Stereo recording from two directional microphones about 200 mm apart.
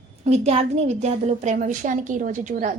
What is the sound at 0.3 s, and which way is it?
A woman's voice, 30° right (ahead or behind).